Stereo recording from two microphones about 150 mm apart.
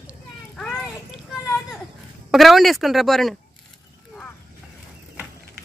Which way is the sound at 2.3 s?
Centre (ahead or behind).